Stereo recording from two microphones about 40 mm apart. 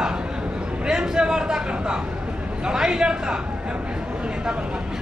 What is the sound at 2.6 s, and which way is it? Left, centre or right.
Speech, centre.